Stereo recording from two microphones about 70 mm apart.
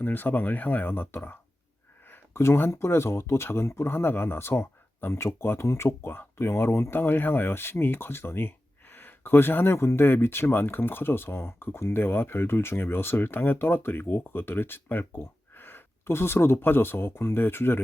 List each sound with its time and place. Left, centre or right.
0.0 s speech: left